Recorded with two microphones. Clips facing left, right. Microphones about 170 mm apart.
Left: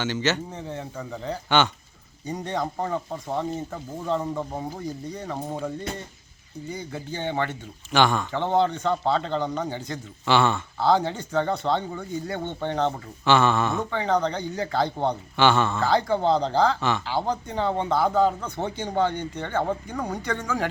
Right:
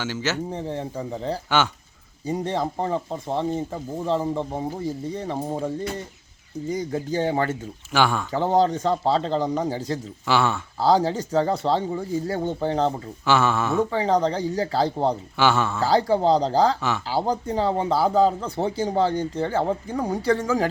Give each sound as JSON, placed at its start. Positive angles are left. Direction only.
{"t": 0.0, "sound": "speech", "side_deg": -5}
{"t": 0.5, "sound": "speech", "side_deg": -35}
{"t": 1.5, "sound": "speech", "side_deg": -5}
{"t": 2.2, "sound": "speech", "side_deg": -30}
{"t": 6.7, "sound": "speech", "side_deg": -40}
{"t": 7.9, "sound": "speech", "side_deg": -5}
{"t": 8.3, "sound": "speech", "side_deg": -35}
{"t": 10.2, "sound": "speech", "side_deg": -5}
{"t": 10.8, "sound": "speech", "side_deg": -35}
{"t": 13.2, "sound": "speech", "side_deg": -5}
{"t": 13.9, "sound": "speech", "side_deg": -35}
{"t": 15.4, "sound": "speech", "side_deg": -5}
{"t": 15.8, "sound": "speech", "side_deg": -35}